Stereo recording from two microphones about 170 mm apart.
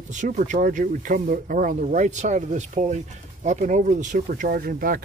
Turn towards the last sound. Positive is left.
turn(degrees=-55)  # may be behind; listen again after turning